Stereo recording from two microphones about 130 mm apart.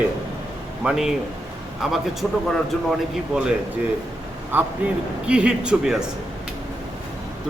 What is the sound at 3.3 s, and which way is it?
Speech, 5° right (ahead or behind).